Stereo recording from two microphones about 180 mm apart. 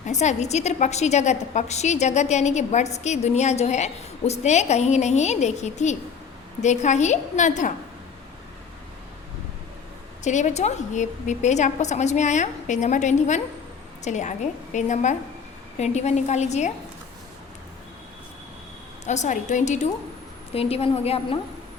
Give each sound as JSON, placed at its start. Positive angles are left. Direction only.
{"t": 0.0, "sound": "a woman's voice", "side_deg": 40}
{"t": 10.2, "sound": "a woman's voice", "side_deg": 40}
{"t": 19.0, "sound": "a woman's voice", "side_deg": 40}